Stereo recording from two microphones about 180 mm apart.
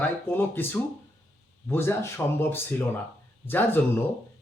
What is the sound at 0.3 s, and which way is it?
Speech, 10° left (ahead or behind).